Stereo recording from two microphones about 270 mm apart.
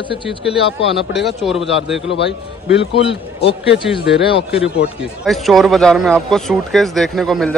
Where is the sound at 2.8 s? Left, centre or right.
Left.